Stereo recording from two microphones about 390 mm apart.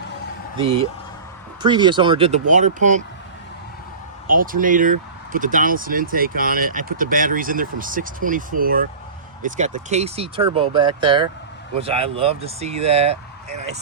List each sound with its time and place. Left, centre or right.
0.6 s speech: centre
4.3 s speech: right